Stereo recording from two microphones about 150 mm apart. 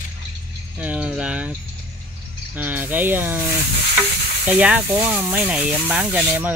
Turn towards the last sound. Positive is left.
turn(degrees=-10)  # may be behind; listen again after turning